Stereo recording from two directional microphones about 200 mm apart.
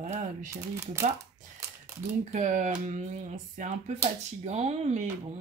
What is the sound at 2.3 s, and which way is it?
Speech, 40° right (ahead or behind).